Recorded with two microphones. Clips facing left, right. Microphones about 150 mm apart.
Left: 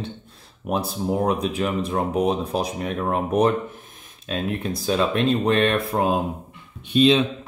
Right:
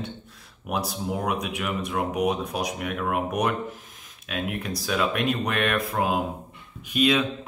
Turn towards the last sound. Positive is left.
turn(degrees=30)  # may be behind; listen again after turning